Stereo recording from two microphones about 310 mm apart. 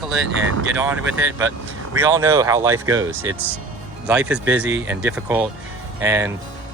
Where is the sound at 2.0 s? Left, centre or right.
Centre.